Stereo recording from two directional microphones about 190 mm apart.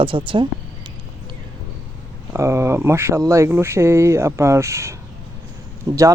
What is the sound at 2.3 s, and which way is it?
Speech, 15° right (ahead or behind).